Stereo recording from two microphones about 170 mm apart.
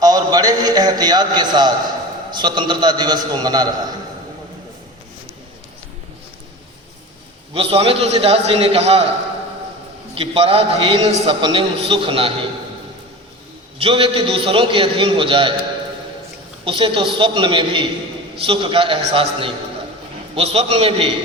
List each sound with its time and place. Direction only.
0.0 s a man's voice: 20° right (ahead or behind)
7.5 s a man's voice: 35° right (ahead or behind)
10.2 s a man's voice: 35° right (ahead or behind)
13.7 s a man's voice: 30° right (ahead or behind)
16.6 s a man's voice: 30° right (ahead or behind)